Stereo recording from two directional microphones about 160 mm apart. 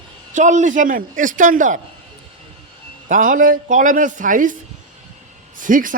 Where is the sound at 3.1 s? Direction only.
55° right (ahead or behind).